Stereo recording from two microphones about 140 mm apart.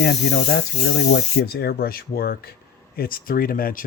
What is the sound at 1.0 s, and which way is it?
Speech, 90° left.